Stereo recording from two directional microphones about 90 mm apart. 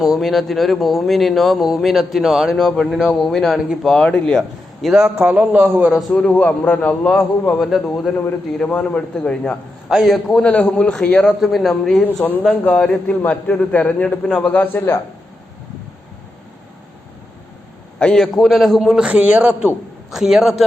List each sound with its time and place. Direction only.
0.0 s a man's voice: centre (ahead or behind)
5.2 s a man's voice: 20° right (ahead or behind)
6.1 s a man's voice: 10° left (ahead or behind)
9.9 s a man's voice: centre (ahead or behind)
10.4 s a man's voice: 15° left (ahead or behind)
12.2 s a man's voice: 20° left (ahead or behind)
14.5 s a man's voice: 20° left (ahead or behind)
18.0 s a man's voice: 5° left (ahead or behind)